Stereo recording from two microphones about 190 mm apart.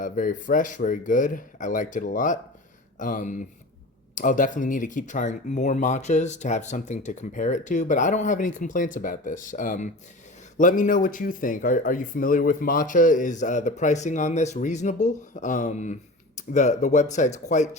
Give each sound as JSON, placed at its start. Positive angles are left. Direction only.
{"t": 0.0, "sound": "speech", "side_deg": 45}